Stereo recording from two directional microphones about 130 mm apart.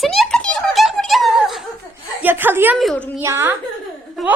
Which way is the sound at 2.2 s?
15° right (ahead or behind).